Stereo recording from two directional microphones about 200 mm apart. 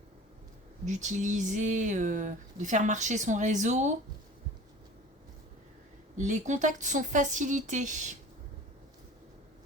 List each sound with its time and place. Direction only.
0.9 s speech: 35° right (ahead or behind)
6.1 s speech: 35° right (ahead or behind)